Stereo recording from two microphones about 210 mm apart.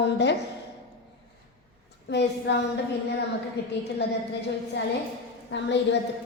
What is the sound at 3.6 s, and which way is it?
Speech, 55° left (ahead or behind).